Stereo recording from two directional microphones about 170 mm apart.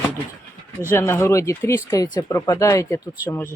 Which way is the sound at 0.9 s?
15° left (ahead or behind).